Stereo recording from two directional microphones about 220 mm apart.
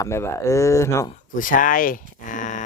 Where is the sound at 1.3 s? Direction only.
35° left (ahead or behind).